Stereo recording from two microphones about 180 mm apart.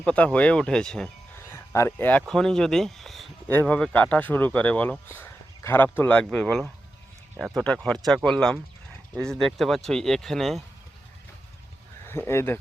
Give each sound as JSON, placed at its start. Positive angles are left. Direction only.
{"t": 0.0, "sound": "speech", "side_deg": 5}
{"t": 1.5, "sound": "speech", "side_deg": 15}
{"t": 7.6, "sound": "speech", "side_deg": 5}
{"t": 12.0, "sound": "speech", "side_deg": 15}